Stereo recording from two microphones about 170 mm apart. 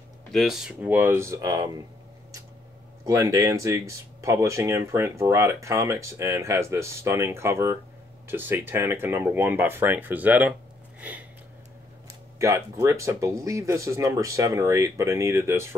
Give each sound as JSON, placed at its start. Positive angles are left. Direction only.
{"t": 0.3, "sound": "speech", "side_deg": 0}
{"t": 3.1, "sound": "speech", "side_deg": -20}
{"t": 11.0, "sound": "a sound", "side_deg": -10}
{"t": 12.4, "sound": "speech", "side_deg": -15}